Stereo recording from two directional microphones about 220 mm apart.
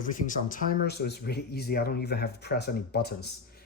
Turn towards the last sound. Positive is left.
turn(degrees=45)  # may be behind; listen again after turning